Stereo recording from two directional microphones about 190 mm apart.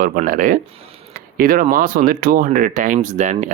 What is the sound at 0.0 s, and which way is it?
Speech, 45° right (ahead or behind).